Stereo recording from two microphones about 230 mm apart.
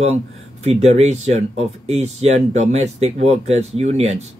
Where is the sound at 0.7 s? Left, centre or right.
Right.